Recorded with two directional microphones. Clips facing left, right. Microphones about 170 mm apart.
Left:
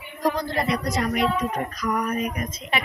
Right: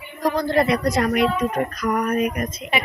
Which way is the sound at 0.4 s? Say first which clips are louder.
Right 6 dB; 65° right (ahead or behind).